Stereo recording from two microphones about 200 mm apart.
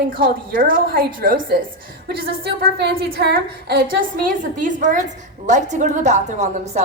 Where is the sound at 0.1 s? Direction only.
45° right (ahead or behind).